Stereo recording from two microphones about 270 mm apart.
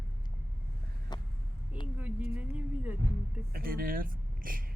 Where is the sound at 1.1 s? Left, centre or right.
Centre.